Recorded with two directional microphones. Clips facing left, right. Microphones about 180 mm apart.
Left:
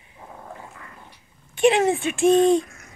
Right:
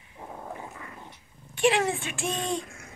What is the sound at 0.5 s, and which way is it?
Dog, 15° right (ahead or behind).